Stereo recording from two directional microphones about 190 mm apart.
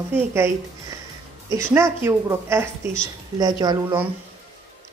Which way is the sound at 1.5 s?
10° right (ahead or behind).